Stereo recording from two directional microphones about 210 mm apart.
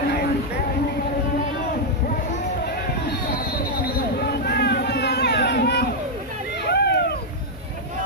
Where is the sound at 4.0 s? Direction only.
50° left (ahead or behind).